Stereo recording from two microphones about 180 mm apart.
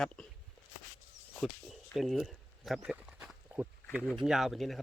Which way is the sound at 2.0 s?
Centre (ahead or behind).